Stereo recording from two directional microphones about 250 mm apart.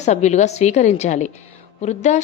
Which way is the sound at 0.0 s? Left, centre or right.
Left.